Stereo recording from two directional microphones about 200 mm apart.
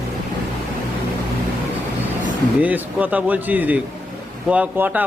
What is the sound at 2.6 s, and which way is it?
Speech, 10° right (ahead or behind).